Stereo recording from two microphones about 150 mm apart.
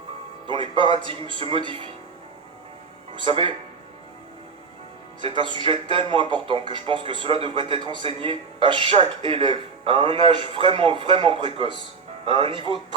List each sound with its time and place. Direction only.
0.4 s a man's voice: 35° right (ahead or behind)
3.2 s a man's voice: 35° right (ahead or behind)
5.2 s a man's voice: 35° right (ahead or behind)